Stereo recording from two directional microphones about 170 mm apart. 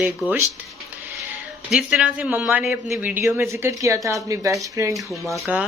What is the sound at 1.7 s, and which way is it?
Speech, 5° right (ahead or behind).